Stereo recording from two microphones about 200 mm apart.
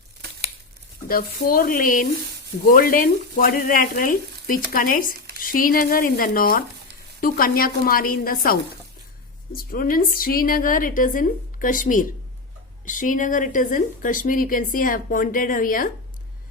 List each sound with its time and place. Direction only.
1.0 s a woman's voice: 45° left (ahead or behind)